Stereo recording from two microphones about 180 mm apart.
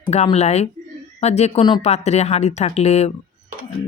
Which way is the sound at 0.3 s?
35° left (ahead or behind).